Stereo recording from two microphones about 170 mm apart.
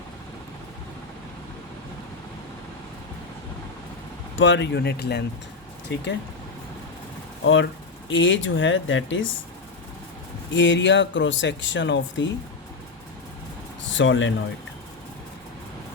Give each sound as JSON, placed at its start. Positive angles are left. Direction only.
{"t": 4.4, "sound": "speech", "side_deg": 90}
{"t": 7.4, "sound": "speech", "side_deg": 90}
{"t": 10.5, "sound": "speech", "side_deg": 90}
{"t": 13.9, "sound": "speech", "side_deg": 90}